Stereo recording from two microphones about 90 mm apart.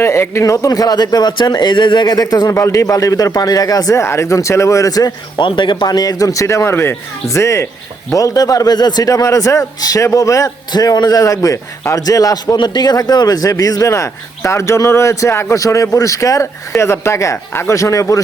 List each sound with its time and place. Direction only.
0.0 s speech: 30° left (ahead or behind)
5.4 s speech: 60° left (ahead or behind); by 12.5 s 40° left (ahead or behind)
12.5 s speech: 50° left (ahead or behind); by 18.2 s 35° left (ahead or behind)